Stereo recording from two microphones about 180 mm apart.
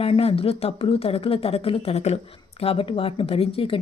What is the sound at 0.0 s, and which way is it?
Speech, 30° left (ahead or behind).